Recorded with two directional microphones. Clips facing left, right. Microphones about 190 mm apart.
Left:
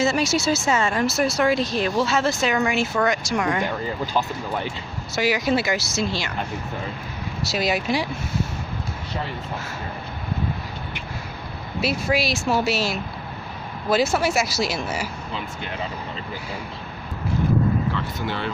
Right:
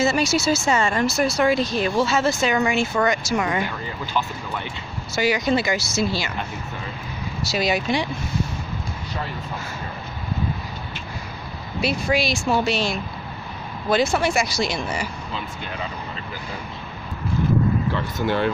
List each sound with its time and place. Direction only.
0.0 s speech: centre (ahead or behind)
4.0 s speech: 40° left (ahead or behind)
5.1 s speech: centre (ahead or behind)
7.4 s speech: centre (ahead or behind)
11.8 s speech: 5° left (ahead or behind)
18.2 s speech: 50° right (ahead or behind)